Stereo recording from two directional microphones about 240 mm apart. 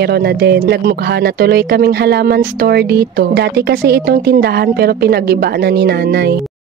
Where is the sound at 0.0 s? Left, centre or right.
Right.